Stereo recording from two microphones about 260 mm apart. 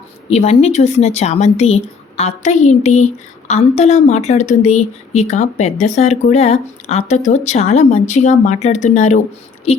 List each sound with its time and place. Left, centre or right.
0.3 s speech: left